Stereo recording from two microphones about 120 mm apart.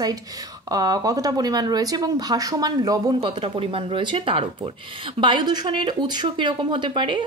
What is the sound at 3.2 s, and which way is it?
Speech, 50° right (ahead or behind).